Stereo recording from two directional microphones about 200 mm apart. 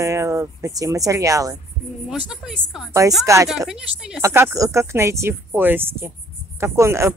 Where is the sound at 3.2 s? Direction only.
15° right (ahead or behind).